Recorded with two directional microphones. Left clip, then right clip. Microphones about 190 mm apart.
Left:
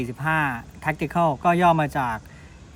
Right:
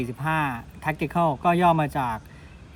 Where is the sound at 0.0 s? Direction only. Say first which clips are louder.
Left 2 dB; centre (ahead or behind).